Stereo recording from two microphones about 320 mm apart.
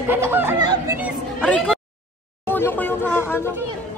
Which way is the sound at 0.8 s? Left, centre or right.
Centre.